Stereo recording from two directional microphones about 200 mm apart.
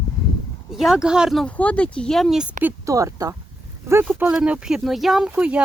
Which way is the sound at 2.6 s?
15° right (ahead or behind).